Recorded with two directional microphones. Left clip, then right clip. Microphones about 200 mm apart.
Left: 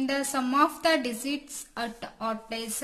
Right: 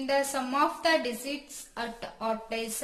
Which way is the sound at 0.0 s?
35° left (ahead or behind).